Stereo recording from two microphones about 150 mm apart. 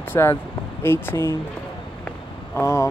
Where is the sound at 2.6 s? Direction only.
15° left (ahead or behind).